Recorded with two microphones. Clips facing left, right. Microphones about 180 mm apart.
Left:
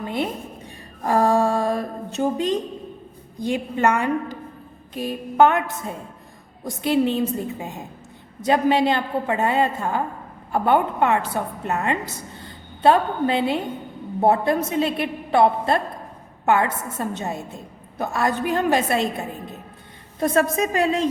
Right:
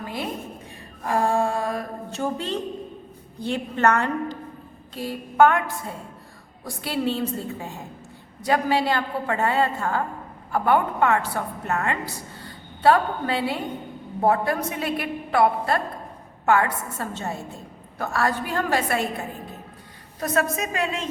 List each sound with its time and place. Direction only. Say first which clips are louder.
0.0 s a woman's voice: left 6 dB; 25° left (ahead or behind)
1.0 s mantra: left 4 dB; 35° left (ahead or behind)
2.0 s a woman's voice: left 6 dB; 15° left (ahead or behind)
20.1 s a woman's voice: left 5 dB; 30° left (ahead or behind)